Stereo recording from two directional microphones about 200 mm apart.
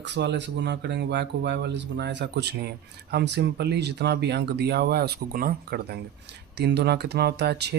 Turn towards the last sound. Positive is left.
turn(degrees=-55)  # may be behind; listen again after turning